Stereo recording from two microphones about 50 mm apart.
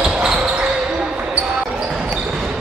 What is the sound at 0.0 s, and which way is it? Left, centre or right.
Basketball bounce, centre.